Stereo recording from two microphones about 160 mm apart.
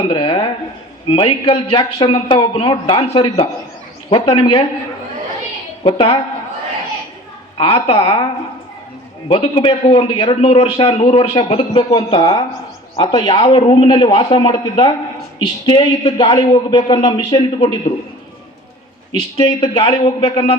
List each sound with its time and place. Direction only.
0.1 s a sound: 30° left (ahead or behind)
1.0 s a man's voice: 35° left (ahead or behind)
5.8 s a man's voice: 35° left (ahead or behind)
7.6 s a man's voice: 35° left (ahead or behind)
9.3 s a man's voice: 30° left (ahead or behind)
19.4 s a man's voice: 35° left (ahead or behind)